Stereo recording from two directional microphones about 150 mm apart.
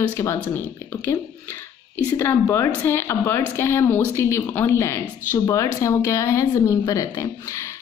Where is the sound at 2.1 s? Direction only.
20° left (ahead or behind).